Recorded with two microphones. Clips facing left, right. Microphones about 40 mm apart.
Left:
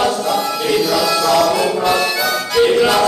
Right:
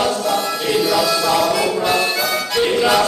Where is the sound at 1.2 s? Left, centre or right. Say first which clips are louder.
Left 3 dB; centre.